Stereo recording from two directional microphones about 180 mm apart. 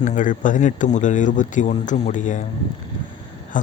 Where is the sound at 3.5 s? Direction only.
45° left (ahead or behind).